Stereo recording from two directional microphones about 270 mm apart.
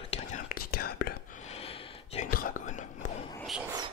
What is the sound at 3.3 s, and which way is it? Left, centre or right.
Whispering, centre.